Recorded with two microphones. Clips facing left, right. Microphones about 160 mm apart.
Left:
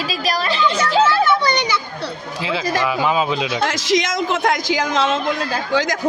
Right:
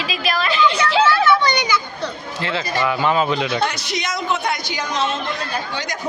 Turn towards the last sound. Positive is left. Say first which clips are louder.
# left 6 dB
turn(degrees=90)